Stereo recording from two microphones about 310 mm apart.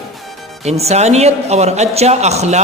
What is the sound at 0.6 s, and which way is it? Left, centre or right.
A man's voice, right.